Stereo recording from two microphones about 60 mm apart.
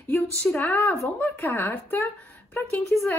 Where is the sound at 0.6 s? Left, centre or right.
Left.